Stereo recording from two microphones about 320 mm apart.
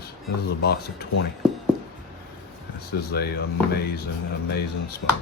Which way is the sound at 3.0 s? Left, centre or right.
Left.